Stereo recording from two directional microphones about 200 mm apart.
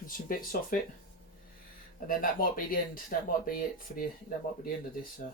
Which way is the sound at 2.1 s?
45° left (ahead or behind).